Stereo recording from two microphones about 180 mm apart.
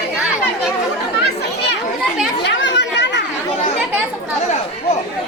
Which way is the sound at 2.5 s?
75° left (ahead or behind).